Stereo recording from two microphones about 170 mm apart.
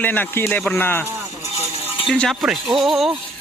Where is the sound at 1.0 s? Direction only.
15° right (ahead or behind).